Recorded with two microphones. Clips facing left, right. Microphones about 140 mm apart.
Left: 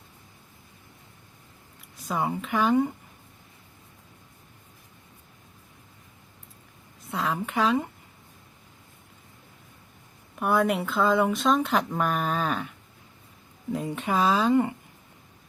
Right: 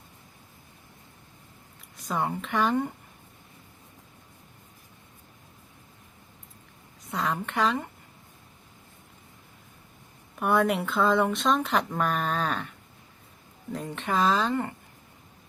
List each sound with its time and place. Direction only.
2.0 s speech: 5° left (ahead or behind)
7.1 s speech: centre (ahead or behind)
10.3 s speech: centre (ahead or behind)
13.7 s speech: 10° left (ahead or behind)